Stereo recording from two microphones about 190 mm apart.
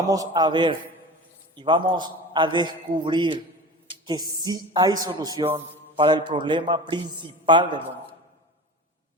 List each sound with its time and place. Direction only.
0.0 s a man's voice: 20° right (ahead or behind)